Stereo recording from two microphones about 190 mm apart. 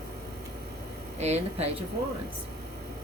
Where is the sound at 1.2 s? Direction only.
35° right (ahead or behind).